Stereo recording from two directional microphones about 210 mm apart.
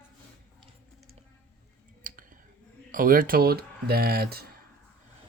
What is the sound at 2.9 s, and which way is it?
Speech, 40° right (ahead or behind).